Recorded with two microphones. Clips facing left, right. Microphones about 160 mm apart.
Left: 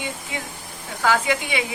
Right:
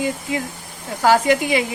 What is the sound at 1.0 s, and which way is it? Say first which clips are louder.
Speech: right 6 dB; 40° right (ahead or behind).